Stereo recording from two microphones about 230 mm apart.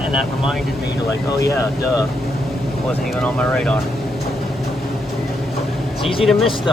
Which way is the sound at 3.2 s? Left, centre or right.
Centre.